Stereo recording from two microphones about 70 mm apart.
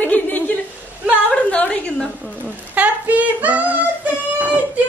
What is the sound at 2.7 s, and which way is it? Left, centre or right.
Female singing, right.